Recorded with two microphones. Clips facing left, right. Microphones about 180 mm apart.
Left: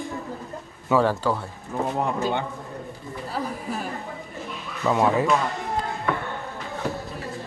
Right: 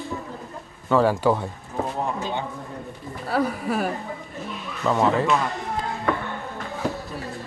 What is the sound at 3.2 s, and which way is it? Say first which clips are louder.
Speech: right 7 dB; 70° right (ahead or behind).